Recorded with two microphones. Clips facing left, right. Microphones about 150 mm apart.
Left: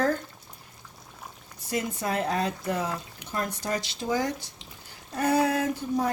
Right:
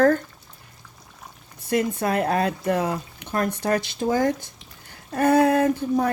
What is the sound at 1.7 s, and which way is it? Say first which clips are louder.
Speech: right 6 dB; 60° right (ahead or behind).